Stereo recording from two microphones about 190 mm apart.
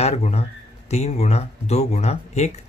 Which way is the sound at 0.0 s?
35° left (ahead or behind).